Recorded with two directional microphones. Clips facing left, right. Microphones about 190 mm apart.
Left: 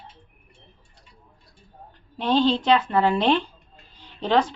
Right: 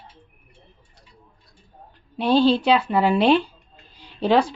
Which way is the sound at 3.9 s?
10° right (ahead or behind).